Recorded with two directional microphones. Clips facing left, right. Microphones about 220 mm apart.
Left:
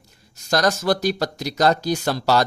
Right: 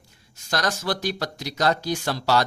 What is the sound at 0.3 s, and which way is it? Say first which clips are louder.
Speech: left 6 dB; 40° left (ahead or behind).